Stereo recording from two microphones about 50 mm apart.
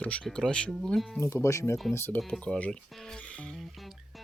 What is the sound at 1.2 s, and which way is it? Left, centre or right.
Speech, left.